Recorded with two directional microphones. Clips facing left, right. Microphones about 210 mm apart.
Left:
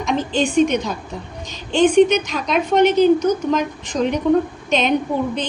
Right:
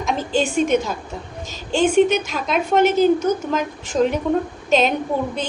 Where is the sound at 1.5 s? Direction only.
5° right (ahead or behind).